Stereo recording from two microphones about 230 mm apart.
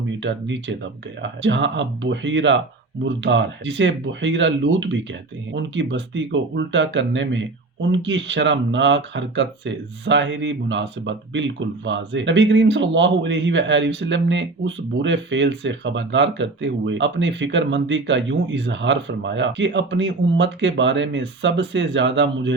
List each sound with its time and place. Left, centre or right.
0.2 s speech: right